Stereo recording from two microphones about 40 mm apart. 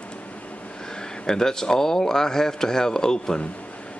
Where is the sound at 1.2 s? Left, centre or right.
Centre.